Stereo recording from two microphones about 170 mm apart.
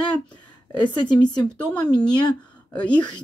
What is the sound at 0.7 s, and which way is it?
A woman's voice, 25° left (ahead or behind).